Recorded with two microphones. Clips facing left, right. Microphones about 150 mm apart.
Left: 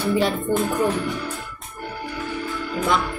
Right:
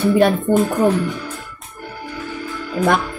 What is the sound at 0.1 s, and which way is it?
Speech, 40° right (ahead or behind).